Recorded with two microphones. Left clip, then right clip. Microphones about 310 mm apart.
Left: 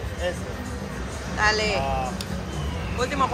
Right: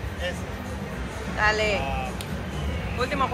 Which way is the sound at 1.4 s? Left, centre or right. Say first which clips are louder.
Left 1 dB; centre.